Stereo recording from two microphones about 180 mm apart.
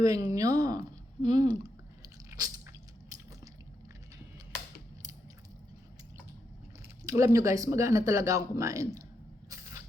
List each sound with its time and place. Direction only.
0.0 s speech: 20° right (ahead or behind)
2.0 s biting: 20° right (ahead or behind)
7.0 s speech: 15° right (ahead or behind)
9.5 s a sound: 20° right (ahead or behind)